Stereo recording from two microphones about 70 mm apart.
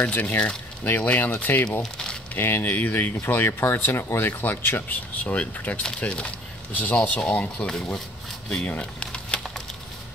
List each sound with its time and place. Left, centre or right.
0.0 s speech: left
1.8 s crumpling: centre
2.3 s speech: left
7.6 s speech: centre
8.6 s a sound: centre